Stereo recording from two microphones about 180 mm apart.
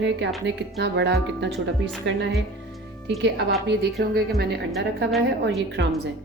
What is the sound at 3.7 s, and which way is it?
Speech, 65° right (ahead or behind).